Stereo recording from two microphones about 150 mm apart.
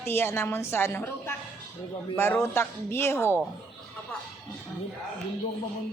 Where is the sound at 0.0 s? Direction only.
15° left (ahead or behind).